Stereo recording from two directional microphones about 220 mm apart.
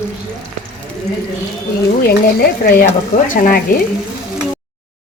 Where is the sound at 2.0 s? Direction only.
45° left (ahead or behind).